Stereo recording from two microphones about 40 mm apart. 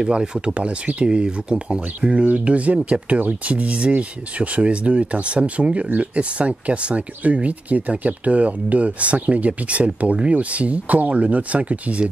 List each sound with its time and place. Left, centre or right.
0.0 s speech: right
0.6 s speech: right